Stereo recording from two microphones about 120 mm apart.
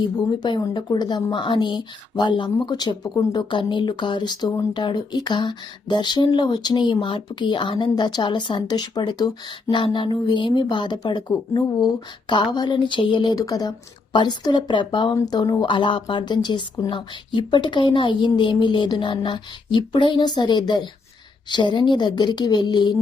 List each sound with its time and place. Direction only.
0.0 s speech: 35° left (ahead or behind)